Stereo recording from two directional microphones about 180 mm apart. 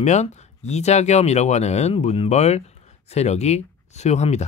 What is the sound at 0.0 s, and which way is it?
Speech, 40° left (ahead or behind).